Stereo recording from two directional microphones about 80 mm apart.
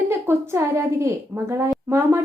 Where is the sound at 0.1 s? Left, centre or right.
Right.